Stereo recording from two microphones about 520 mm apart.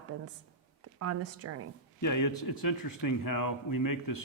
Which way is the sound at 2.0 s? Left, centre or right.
Left.